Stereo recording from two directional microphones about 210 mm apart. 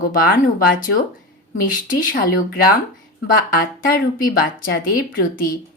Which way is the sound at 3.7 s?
40° left (ahead or behind).